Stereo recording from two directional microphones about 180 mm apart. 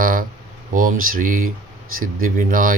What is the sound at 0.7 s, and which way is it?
Speech, 50° right (ahead or behind).